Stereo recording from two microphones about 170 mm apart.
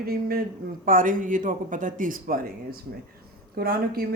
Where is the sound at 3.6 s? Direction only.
65° right (ahead or behind).